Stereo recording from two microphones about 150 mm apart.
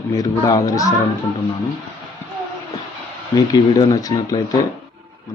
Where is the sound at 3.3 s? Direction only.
25° left (ahead or behind).